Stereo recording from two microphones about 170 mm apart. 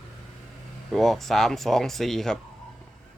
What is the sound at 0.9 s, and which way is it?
Speech, centre (ahead or behind).